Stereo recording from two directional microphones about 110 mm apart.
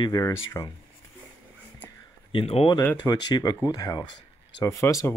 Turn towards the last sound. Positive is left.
turn(degrees=30)  # may be behind; listen again after turning